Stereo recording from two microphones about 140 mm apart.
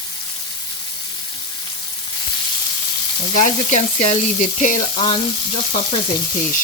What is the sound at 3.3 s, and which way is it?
Speech, 60° left (ahead or behind).